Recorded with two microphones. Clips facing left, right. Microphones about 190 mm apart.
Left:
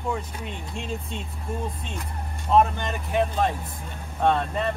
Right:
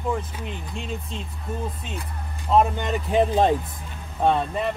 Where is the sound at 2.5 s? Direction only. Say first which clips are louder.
Right 1 dB; 15° right (ahead or behind).